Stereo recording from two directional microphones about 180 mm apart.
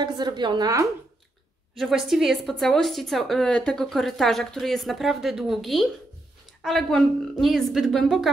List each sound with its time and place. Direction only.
0.0 s a woman's voice: 25° right (ahead or behind)
1.8 s a woman's voice: centre (ahead or behind)